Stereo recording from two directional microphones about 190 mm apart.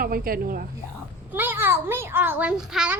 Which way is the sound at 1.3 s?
10° right (ahead or behind).